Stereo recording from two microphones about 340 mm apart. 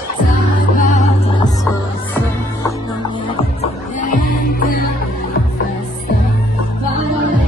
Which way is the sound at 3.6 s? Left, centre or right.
Left.